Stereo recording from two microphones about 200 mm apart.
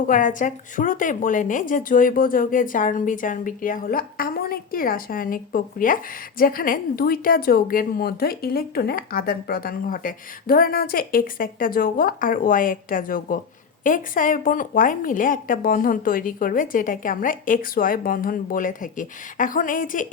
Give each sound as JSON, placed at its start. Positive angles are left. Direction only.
{"t": 0.1, "sound": "a woman's voice", "side_deg": 40}